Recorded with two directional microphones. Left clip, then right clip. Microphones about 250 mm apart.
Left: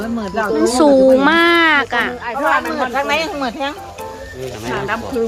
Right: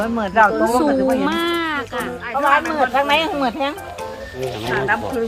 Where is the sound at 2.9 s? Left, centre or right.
Right.